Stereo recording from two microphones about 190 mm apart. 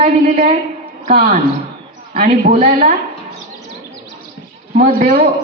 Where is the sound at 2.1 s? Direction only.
40° right (ahead or behind).